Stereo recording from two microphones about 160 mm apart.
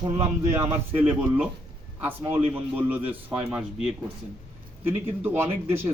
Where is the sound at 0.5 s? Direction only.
10° right (ahead or behind).